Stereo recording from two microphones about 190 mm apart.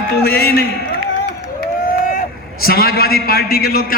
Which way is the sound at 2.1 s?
50° left (ahead or behind).